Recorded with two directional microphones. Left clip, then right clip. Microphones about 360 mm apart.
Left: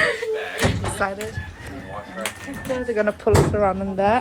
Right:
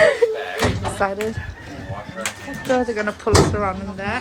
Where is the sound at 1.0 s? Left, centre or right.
Centre.